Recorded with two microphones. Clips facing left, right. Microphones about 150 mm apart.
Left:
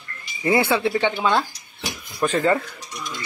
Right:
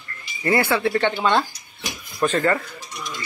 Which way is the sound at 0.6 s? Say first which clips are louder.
Right 1 dB; 20° left (ahead or behind).